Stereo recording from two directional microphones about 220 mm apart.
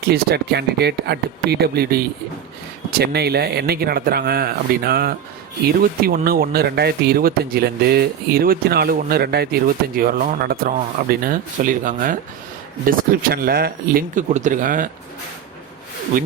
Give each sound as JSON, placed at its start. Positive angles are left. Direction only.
{"t": 0.0, "sound": "speech", "side_deg": -45}
{"t": 3.0, "sound": "speech", "side_deg": -45}